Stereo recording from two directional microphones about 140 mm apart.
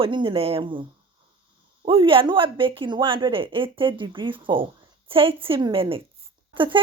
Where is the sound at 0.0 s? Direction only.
35° right (ahead or behind).